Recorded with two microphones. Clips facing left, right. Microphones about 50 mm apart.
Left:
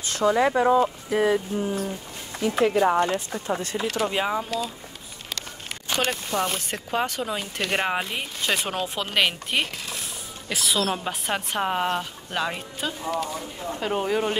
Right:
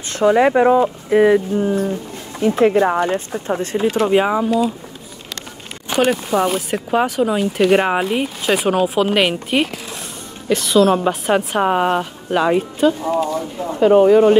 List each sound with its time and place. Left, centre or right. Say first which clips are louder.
0.1 s speech: right 7 dB; right
3.0 s speech: right 5 dB; right
4.1 s speech: right 10 dB; right
5.9 s a woman's voice: right 10 dB; centre